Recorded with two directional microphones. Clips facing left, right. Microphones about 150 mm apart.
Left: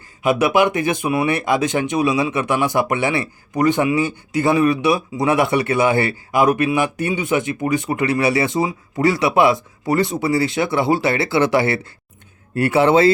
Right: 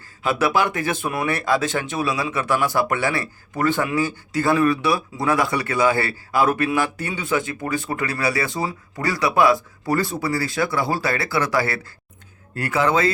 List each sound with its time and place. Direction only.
0.2 s speech: 20° left (ahead or behind)